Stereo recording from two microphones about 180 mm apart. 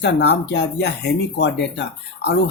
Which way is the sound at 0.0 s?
70° left (ahead or behind).